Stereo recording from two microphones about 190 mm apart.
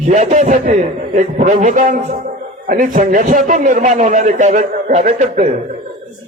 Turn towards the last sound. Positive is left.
turn(degrees=-35)  # may be behind; listen again after turning